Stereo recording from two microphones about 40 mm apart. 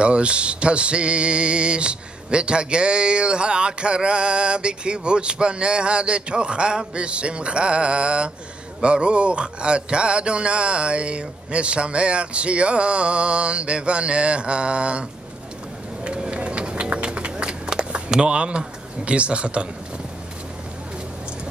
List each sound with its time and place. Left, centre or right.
0.0 s speech: right
16.0 s vehicle: right
16.3 s a sound: right
18.2 s speech: right